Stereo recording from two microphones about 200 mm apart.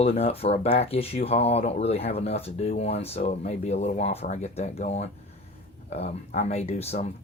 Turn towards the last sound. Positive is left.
turn(degrees=30)  # may be behind; listen again after turning